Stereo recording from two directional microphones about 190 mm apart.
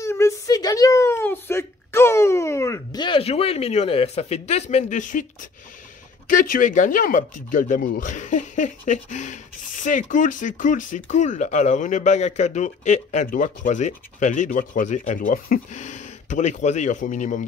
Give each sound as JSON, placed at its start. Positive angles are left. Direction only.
{"t": 0.0, "sound": "a woman's voice", "side_deg": 15}